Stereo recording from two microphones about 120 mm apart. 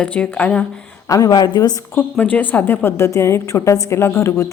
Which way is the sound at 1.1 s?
30° left (ahead or behind).